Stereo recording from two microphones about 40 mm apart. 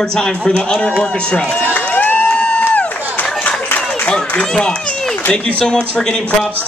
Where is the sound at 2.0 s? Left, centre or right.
Left.